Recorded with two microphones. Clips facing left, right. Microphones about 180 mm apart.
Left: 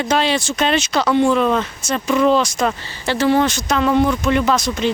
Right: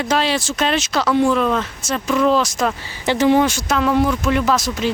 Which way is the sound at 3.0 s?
15° right (ahead or behind).